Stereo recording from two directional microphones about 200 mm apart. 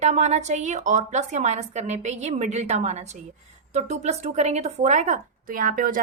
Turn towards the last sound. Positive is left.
turn(degrees=-40)  # may be behind; listen again after turning